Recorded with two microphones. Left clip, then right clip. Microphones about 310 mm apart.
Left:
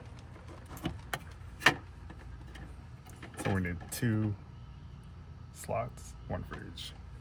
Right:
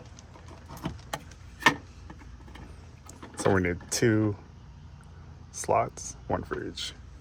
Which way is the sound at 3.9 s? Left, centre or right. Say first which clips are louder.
Right 14 dB; right.